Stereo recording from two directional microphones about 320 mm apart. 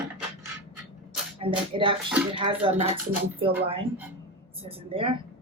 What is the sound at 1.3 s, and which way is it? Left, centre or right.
A woman's voice, centre.